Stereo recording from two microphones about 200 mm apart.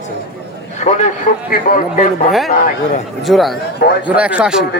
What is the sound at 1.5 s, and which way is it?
Speech, 45° left (ahead or behind).